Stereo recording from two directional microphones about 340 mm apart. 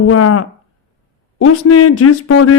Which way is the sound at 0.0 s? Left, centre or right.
Left.